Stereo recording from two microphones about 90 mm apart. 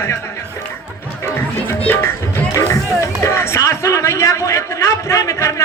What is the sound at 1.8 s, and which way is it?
A man's voice, 25° left (ahead or behind).